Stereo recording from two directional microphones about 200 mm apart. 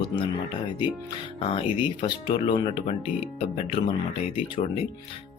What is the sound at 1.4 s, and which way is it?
Speech, 25° left (ahead or behind).